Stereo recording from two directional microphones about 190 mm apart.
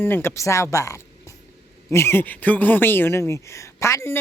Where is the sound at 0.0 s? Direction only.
10° left (ahead or behind).